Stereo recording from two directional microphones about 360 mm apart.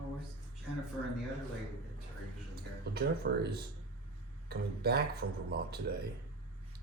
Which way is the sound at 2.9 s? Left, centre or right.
Right.